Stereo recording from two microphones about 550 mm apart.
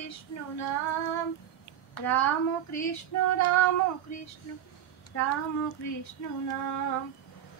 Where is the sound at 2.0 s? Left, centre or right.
Left.